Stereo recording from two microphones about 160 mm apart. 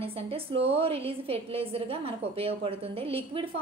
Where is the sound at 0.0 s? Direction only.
35° right (ahead or behind).